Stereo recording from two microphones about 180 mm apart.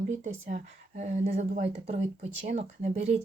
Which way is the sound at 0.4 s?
40° right (ahead or behind).